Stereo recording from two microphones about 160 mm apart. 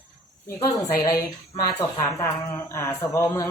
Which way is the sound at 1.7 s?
20° left (ahead or behind).